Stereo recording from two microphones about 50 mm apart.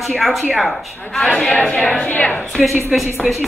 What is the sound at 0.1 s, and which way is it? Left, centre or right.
Speech, centre.